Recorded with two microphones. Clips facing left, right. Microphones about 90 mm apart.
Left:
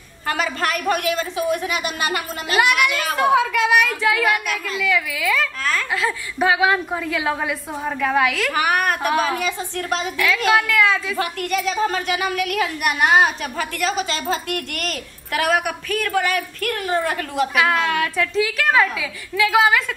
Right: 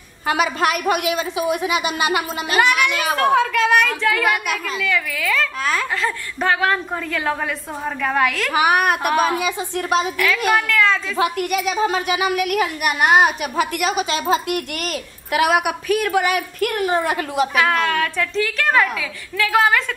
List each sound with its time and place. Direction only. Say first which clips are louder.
0.3 s speech: right 4 dB; 15° right (ahead or behind)
2.5 s a woman's voice: even; centre (ahead or behind)
5.6 s speech: right 2 dB; 15° right (ahead or behind)
5.9 s a woman's voice: left 1 dB; 5° left (ahead or behind)
8.5 s a woman's voice: right 5 dB; 15° right (ahead or behind)
10.7 s speech: even; 5° left (ahead or behind)
11.1 s speech: right 3 dB; 10° right (ahead or behind)
17.6 s a woman's voice: even; 5° left (ahead or behind)